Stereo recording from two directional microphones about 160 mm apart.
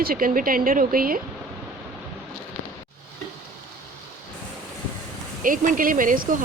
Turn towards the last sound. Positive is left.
turn(degrees=-55)  # may be behind; listen again after turning